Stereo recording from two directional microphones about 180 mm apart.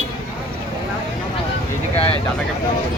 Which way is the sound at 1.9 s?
35° left (ahead or behind).